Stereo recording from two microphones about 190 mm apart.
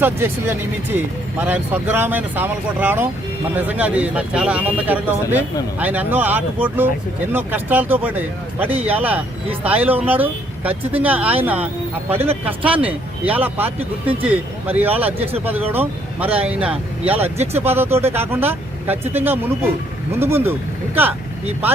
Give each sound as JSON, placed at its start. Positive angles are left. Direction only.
{"t": 0.9, "sound": "speech", "side_deg": -10}
{"t": 17.3, "sound": "speech", "side_deg": -35}
{"t": 17.6, "sound": "speech", "side_deg": -10}